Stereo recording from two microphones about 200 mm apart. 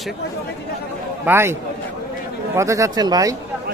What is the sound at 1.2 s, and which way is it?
Speech, 10° right (ahead or behind).